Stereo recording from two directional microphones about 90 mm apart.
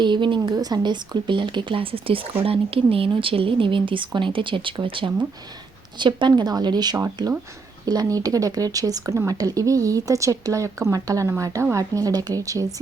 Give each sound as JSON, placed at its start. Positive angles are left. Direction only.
{"t": 0.0, "sound": "speech", "side_deg": -60}
{"t": 6.0, "sound": "speech", "side_deg": -60}